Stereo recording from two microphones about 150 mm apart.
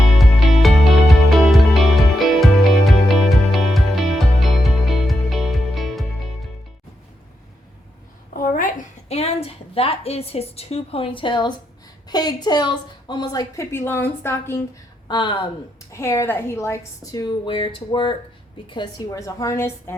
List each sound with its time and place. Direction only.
0.2 s music: centre (ahead or behind)
8.3 s a sound: 70° left (ahead or behind); by 11.5 s 30° left (ahead or behind)
12.0 s a woman's voice: 25° left (ahead or behind)
15.0 s speech: 30° left (ahead or behind)
15.9 s a woman's voice: 20° left (ahead or behind)